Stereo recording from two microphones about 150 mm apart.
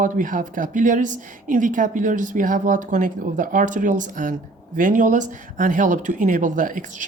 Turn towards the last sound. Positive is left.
turn(degrees=-60)  # may be behind; listen again after turning